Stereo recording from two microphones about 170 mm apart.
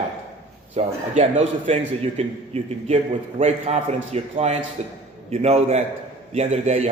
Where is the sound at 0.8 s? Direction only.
40° right (ahead or behind).